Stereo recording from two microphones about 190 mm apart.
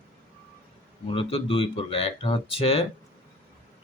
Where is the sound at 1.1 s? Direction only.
30° left (ahead or behind).